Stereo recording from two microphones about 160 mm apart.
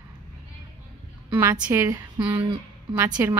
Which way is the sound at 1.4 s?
15° right (ahead or behind).